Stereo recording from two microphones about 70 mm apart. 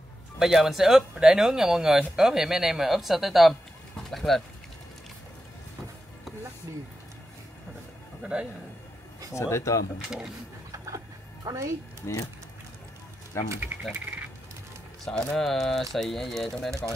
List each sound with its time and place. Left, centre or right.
0.4 s speech: centre
8.2 s a man's voice: centre
9.3 s speech: left
10.0 s speech: centre
11.4 s speech: right
12.0 s speech: left
13.4 s speech: left
15.0 s speech: centre